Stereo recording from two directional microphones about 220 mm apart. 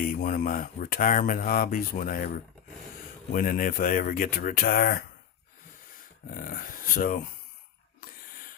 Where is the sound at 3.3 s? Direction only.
40° left (ahead or behind).